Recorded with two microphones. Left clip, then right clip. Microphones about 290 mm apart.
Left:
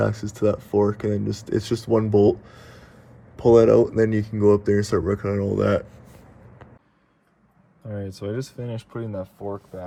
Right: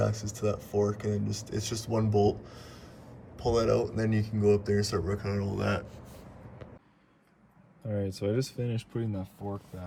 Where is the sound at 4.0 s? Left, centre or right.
Centre.